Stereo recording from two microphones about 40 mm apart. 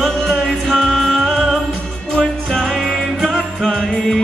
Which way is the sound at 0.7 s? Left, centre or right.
Centre.